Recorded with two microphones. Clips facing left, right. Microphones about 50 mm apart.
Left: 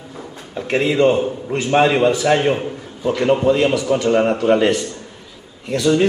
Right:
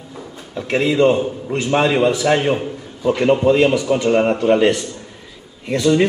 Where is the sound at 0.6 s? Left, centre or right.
Centre.